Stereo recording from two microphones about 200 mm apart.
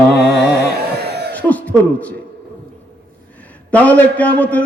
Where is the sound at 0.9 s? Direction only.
55° right (ahead or behind).